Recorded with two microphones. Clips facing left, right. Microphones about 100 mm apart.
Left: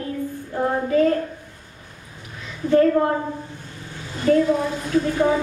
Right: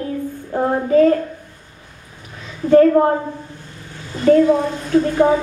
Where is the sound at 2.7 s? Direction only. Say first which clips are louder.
Right 5 dB; 35° right (ahead or behind).